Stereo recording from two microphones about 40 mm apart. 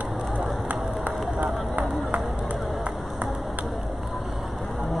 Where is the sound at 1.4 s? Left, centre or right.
Right.